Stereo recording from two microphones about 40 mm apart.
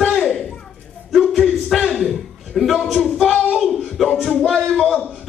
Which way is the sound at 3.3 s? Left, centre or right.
Left.